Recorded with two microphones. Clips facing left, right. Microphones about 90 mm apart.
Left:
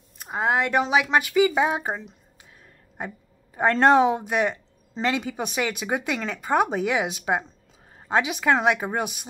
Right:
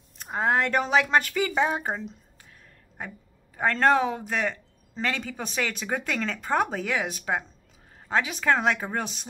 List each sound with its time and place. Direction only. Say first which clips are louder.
0.2 s speech: left 1 dB; 10° left (ahead or behind)
3.5 s speech: left 4 dB; 25° left (ahead or behind)